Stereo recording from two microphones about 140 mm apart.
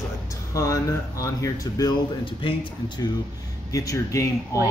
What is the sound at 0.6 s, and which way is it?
Speech, 20° left (ahead or behind).